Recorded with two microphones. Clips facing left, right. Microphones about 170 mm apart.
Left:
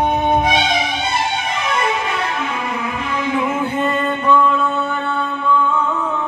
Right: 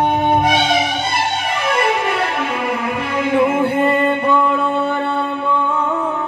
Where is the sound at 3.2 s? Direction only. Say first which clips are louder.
Right 6 dB; 55° right (ahead or behind).